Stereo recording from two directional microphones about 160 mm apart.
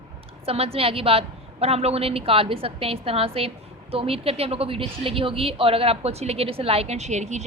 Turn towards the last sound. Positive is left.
turn(degrees=-45)  # may be behind; listen again after turning